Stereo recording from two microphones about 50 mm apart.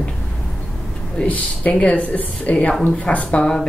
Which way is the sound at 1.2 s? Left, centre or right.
Left.